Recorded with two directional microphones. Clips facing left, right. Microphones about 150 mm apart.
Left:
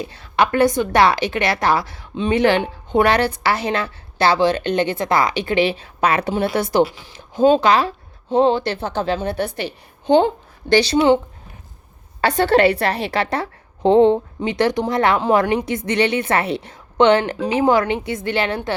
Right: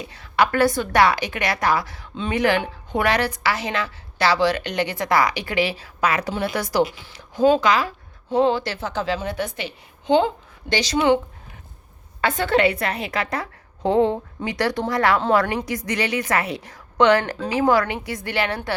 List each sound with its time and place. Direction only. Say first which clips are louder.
0.0 s a woman's voice: left 2 dB; 30° left (ahead or behind)
12.4 s a woman's voice: left 5 dB; 35° left (ahead or behind)